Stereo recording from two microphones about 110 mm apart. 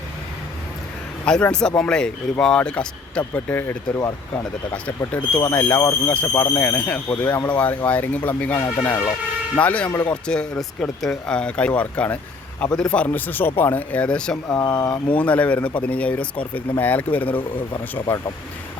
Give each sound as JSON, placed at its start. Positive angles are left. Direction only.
{"t": 1.2, "sound": "speech", "side_deg": 10}
{"t": 4.7, "sound": "speech", "side_deg": 10}